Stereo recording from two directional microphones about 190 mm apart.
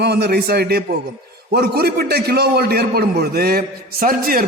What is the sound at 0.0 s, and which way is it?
A man's voice, 60° right (ahead or behind).